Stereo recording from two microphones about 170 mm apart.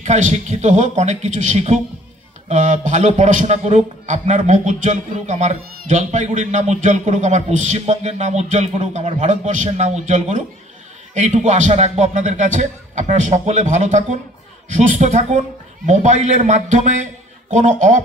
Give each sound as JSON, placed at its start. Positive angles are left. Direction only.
{"t": 0.0, "sound": "a man's voice", "side_deg": -45}